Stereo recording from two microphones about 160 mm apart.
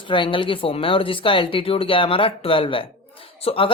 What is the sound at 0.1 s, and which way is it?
Speech, 30° left (ahead or behind).